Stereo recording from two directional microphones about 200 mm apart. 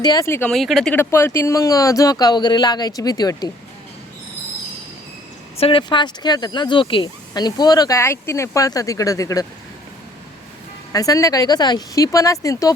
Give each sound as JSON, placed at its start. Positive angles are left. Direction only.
{"t": 0.0, "sound": "speech", "side_deg": 20}
{"t": 0.5, "sound": "speech", "side_deg": 0}
{"t": 0.9, "sound": "speech", "side_deg": 15}
{"t": 5.5, "sound": "speech", "side_deg": 30}
{"t": 10.9, "sound": "speech", "side_deg": 15}